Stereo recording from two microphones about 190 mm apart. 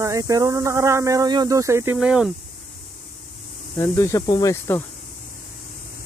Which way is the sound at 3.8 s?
15° left (ahead or behind).